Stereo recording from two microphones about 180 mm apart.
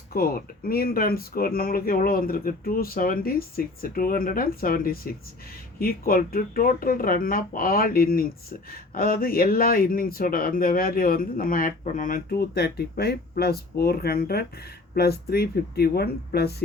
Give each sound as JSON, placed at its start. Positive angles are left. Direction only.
{"t": 0.1, "sound": "speech", "side_deg": 55}